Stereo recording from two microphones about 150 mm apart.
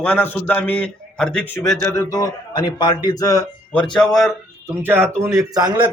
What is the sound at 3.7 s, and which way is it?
Speech, 5° left (ahead or behind).